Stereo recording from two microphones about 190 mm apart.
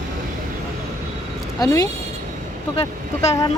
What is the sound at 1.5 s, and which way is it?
Speech, 20° left (ahead or behind).